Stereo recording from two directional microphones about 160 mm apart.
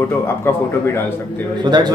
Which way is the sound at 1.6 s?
25° right (ahead or behind).